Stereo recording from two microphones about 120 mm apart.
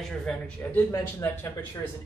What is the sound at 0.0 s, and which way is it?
Speech, 5° left (ahead or behind).